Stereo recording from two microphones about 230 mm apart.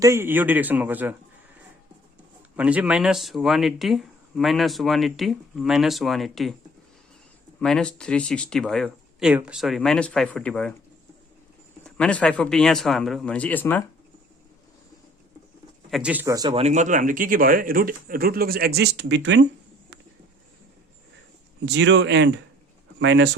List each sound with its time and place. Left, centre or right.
0.0 s speech: centre
2.6 s speech: centre
7.6 s speech: centre
11.9 s speech: centre
15.9 s speech: centre; by 19.5 s right
21.7 s speech: right